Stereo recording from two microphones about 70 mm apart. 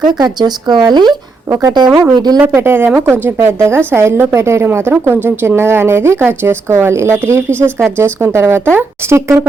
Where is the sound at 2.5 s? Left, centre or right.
Right.